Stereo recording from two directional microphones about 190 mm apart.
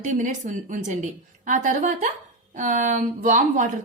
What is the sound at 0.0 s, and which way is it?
Speech, 40° right (ahead or behind).